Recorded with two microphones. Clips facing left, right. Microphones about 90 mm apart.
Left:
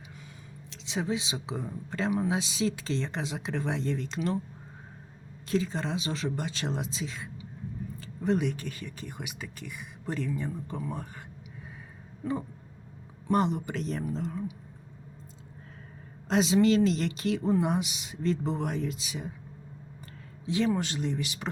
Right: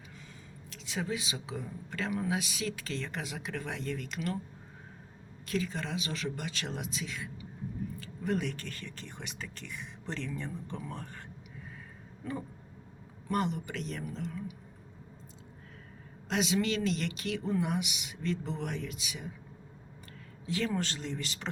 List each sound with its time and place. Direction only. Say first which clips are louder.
0.7 s a woman's voice: left 4 dB; 20° left (ahead or behind)
5.5 s speech: left 5 dB; 30° left (ahead or behind); by 11.1 s 5° left (ahead or behind)
13.2 s speech: left 5 dB; 30° left (ahead or behind)
16.3 s speech: left 7 dB; 30° left (ahead or behind)
20.7 s speech: left 5 dB; 10° left (ahead or behind)